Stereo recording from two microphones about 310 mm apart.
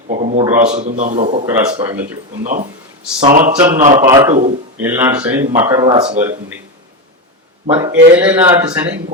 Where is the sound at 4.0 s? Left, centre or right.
Centre.